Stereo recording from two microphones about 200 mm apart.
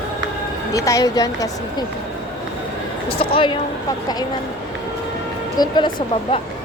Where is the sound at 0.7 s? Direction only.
15° left (ahead or behind).